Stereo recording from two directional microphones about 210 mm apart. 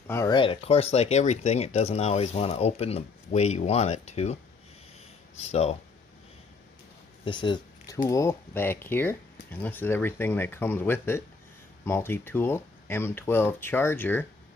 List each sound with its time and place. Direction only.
0.0 s speech: 15° left (ahead or behind); by 4.4 s 30° left (ahead or behind)
5.4 s speech: 30° left (ahead or behind)
7.2 s speech: 20° left (ahead or behind)